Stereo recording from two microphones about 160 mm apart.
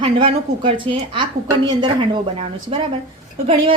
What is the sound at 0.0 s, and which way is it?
A woman's voice, 35° right (ahead or behind).